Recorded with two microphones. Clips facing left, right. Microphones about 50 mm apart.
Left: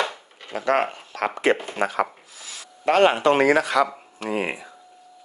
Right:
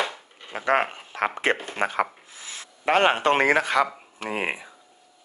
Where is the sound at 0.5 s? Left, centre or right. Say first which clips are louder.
Left 1 dB; right.